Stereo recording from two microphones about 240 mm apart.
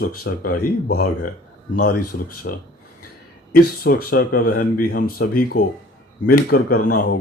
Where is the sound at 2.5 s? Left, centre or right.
Left.